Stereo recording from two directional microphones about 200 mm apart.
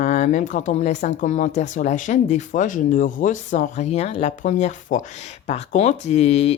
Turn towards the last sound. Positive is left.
turn(degrees=30)  # may be behind; listen again after turning